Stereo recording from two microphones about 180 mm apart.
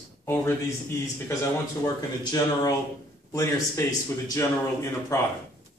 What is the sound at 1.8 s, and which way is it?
Speech, 20° left (ahead or behind).